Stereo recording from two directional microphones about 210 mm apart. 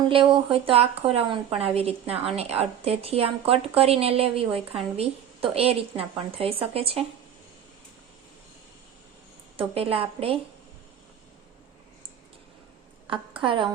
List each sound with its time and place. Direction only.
0.5 s a woman's voice: 25° right (ahead or behind)
9.6 s a woman's voice: 25° right (ahead or behind)
13.1 s a woman's voice: 25° right (ahead or behind)